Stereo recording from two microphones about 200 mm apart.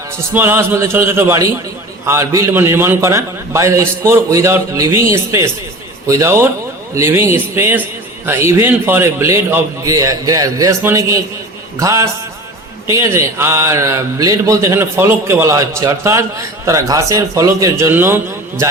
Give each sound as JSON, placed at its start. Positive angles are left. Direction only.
{"t": 0.3, "sound": "a man's voice", "side_deg": -10}